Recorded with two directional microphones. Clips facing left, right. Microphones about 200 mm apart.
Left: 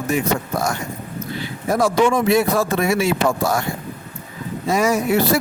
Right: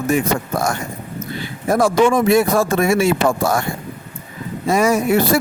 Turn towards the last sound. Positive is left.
turn(degrees=-50)  # may be behind; listen again after turning